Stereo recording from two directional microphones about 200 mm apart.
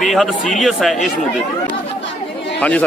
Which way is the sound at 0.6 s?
Centre (ahead or behind).